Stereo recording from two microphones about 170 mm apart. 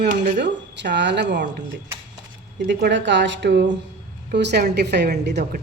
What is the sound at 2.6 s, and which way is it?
A man's voice, 85° right.